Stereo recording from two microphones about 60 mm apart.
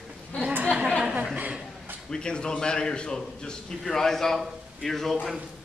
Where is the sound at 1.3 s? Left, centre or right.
Right.